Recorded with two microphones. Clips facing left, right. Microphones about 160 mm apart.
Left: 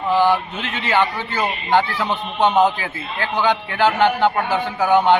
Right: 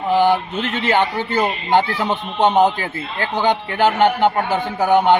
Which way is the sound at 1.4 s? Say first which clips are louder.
Right 1 dB; 20° right (ahead or behind).